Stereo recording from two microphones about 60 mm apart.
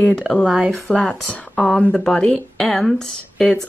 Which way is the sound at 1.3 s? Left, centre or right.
Left.